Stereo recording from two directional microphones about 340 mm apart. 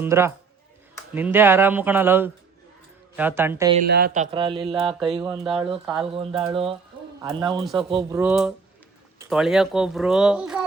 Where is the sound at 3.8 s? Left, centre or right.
Right; by 7.6 s centre.